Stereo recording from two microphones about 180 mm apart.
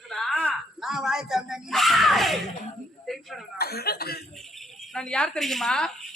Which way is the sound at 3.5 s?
60° left (ahead or behind).